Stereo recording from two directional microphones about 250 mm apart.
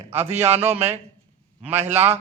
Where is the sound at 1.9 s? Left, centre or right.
Right.